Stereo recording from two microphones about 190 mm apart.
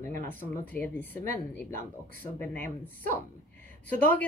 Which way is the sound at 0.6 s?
10° left (ahead or behind).